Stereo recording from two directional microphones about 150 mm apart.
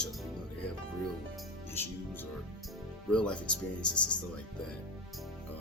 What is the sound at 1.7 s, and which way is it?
Speech, 15° left (ahead or behind).